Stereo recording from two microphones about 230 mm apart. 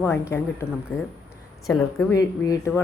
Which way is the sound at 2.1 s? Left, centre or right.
Centre.